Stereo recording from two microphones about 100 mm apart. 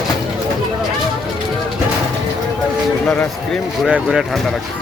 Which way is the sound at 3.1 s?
5° left (ahead or behind).